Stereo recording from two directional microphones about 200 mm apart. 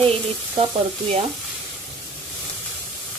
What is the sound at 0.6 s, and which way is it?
Speech, 30° right (ahead or behind).